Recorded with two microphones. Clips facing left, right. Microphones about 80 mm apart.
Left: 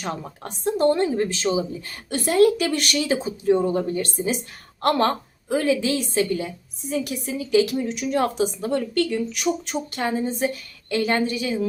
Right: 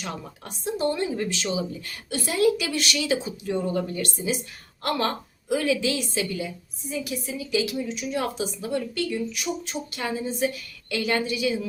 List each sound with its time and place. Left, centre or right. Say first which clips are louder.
0.6 s a woman's voice: left 6 dB; left
1.1 s speech: left 5 dB; left
2.0 s speech: left 5 dB; left
4.8 s speech: left 6 dB; left
6.9 s a woman's voice: left 4 dB; left
10.0 s speech: left 3 dB; left